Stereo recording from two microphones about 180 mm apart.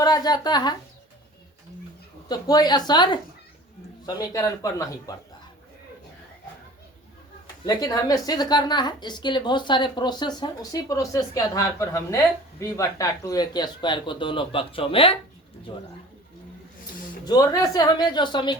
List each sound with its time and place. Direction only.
0.0 s speech: 20° left (ahead or behind)
2.3 s a woman's voice: 20° left (ahead or behind)
7.6 s a woman's voice: 20° left (ahead or behind)
17.2 s a woman's voice: 20° left (ahead or behind)